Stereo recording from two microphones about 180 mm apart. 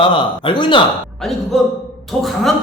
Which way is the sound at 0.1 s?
25° left (ahead or behind).